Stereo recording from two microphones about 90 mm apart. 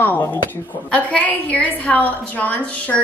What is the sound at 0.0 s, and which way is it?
A woman's voice, 20° left (ahead or behind).